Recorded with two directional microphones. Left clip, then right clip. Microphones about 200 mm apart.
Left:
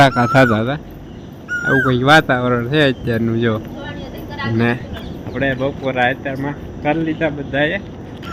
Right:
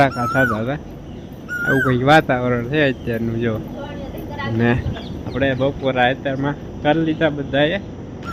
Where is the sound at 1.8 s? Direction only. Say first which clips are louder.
Left 2 dB; 5° left (ahead or behind).